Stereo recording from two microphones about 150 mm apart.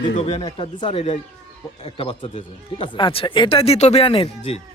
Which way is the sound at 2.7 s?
35° left (ahead or behind).